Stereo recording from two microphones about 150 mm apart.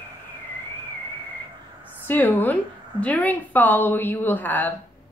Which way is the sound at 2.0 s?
15° left (ahead or behind).